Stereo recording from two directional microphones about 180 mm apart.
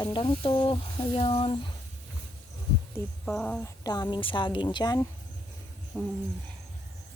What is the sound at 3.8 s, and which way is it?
Speech, 25° left (ahead or behind).